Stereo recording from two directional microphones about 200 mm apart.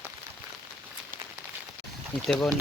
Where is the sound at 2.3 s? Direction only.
Centre (ahead or behind).